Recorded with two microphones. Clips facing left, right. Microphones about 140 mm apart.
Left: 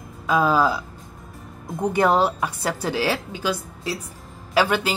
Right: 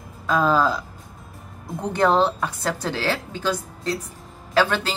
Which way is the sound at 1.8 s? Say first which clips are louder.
Even; 10° left (ahead or behind).